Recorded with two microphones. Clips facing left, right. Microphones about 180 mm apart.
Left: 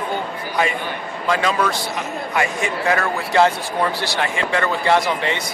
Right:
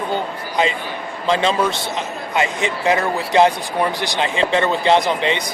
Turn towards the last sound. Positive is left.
turn(degrees=-20)  # may be behind; listen again after turning